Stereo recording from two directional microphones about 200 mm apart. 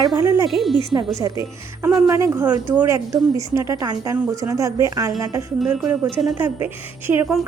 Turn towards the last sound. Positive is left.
turn(degrees=-10)  # may be behind; listen again after turning